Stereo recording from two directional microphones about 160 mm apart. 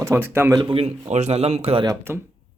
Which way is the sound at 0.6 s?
30° right (ahead or behind).